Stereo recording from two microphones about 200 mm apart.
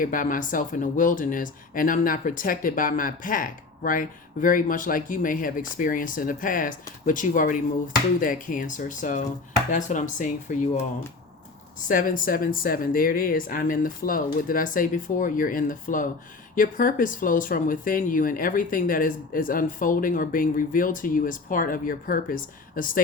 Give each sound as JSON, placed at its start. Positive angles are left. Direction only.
{"t": 0.0, "sound": "speech", "side_deg": 45}
{"t": 11.9, "sound": "speech", "side_deg": 45}